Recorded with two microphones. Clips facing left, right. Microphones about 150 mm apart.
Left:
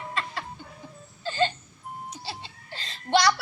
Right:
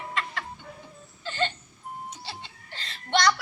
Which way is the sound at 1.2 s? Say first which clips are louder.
Left 4 dB; 35° left (ahead or behind).